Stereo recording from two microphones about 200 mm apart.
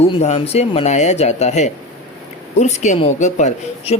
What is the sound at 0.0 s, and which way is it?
Speech, 30° left (ahead or behind).